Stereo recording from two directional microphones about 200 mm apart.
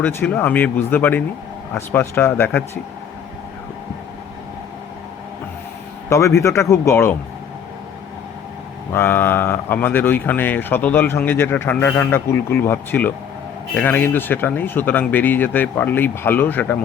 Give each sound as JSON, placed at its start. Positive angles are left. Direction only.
{"t": 0.0, "sound": "speech", "side_deg": 10}
{"t": 6.1, "sound": "speech", "side_deg": 15}
{"t": 8.9, "sound": "speech", "side_deg": 10}